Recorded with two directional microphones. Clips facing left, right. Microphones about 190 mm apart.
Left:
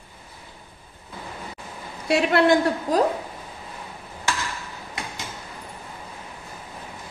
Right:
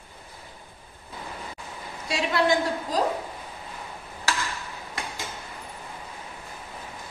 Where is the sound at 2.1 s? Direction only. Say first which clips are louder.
Left 6 dB; 60° left (ahead or behind).